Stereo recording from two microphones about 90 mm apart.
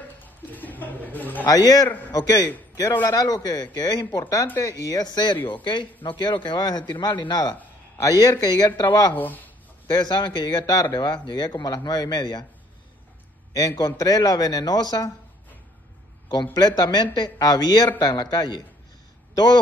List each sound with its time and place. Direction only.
0.5 s a man's voice: 20° left (ahead or behind)
1.5 s a man's voice: 45° left (ahead or behind)
8.0 s speech: 40° left (ahead or behind)
9.1 s speech: 20° left (ahead or behind)
9.8 s speech: 55° left (ahead or behind)
13.5 s speech: 40° left (ahead or behind)
16.5 s a man's voice: 50° left (ahead or behind)